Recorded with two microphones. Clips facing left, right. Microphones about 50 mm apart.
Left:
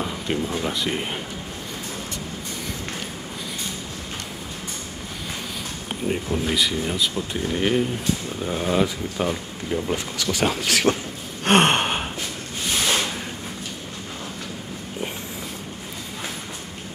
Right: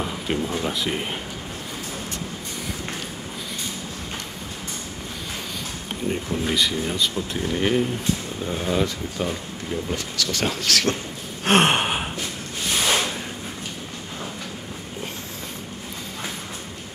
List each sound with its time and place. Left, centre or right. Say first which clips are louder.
0.0 s speech: even; centre
5.9 s speech: left 1 dB; centre
10.4 s speech: left 3 dB; centre
11.4 s gasp: left 1 dB; centre